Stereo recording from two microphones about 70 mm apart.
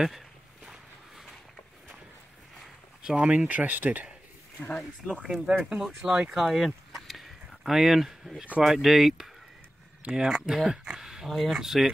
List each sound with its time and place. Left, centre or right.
3.0 s speech: centre
4.6 s speech: centre
5.0 s speech: centre